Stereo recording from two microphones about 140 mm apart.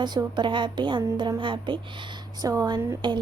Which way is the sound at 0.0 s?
30° right (ahead or behind).